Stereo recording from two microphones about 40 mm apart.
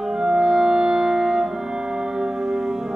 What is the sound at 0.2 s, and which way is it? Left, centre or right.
Music, centre.